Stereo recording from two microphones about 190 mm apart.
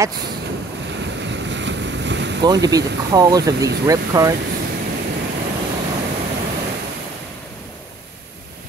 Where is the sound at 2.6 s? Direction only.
20° right (ahead or behind).